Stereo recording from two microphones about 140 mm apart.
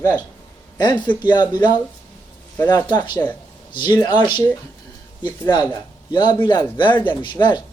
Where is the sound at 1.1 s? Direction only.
30° left (ahead or behind).